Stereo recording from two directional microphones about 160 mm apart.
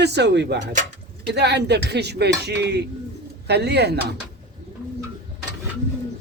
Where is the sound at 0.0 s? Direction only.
90° right.